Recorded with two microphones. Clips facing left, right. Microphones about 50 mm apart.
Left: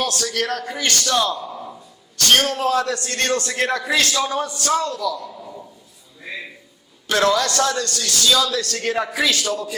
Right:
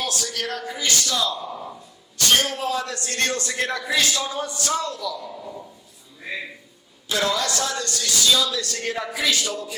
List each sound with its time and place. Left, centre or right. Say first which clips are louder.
0.0 s a man's voice: left 5 dB; left
7.1 s a man's voice: left 5 dB; left